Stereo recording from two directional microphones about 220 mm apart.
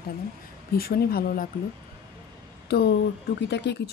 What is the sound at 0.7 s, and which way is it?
Speech, 45° left (ahead or behind).